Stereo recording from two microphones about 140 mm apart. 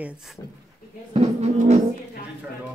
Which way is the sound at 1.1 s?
50° right (ahead or behind).